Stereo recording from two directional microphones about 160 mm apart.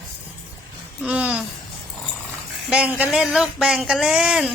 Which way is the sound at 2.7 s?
10° right (ahead or behind).